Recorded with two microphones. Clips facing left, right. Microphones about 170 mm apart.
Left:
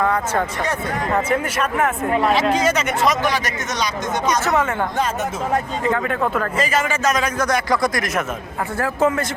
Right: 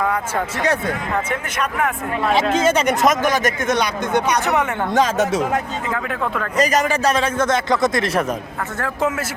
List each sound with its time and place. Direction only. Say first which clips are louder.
1.1 s speech: left 3 dB; 5° left (ahead or behind)
2.5 s speech: right 2 dB; 25° right (ahead or behind)
3.0 s speech: right 3 dB; 45° right (ahead or behind)
4.9 s speech: right 5 dB; 90° right
5.9 s speech: left 3 dB; centre (ahead or behind)
6.6 s a man's voice: right 6 dB; 40° right (ahead or behind)
8.8 s speech: left 3 dB; centre (ahead or behind)